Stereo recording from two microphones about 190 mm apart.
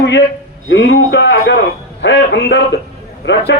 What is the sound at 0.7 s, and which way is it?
A man's voice, 65° left (ahead or behind).